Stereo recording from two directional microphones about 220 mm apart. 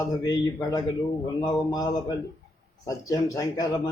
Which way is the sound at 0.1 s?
15° left (ahead or behind).